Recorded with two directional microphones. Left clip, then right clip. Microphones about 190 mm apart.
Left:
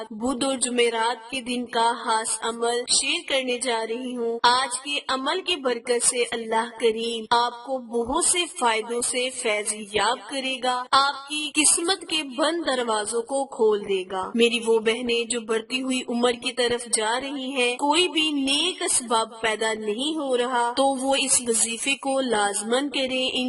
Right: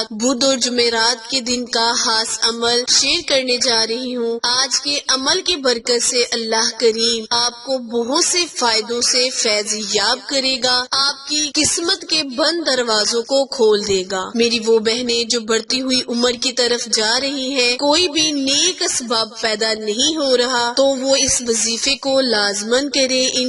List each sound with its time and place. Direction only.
0.3 s a woman's voice: 25° right (ahead or behind)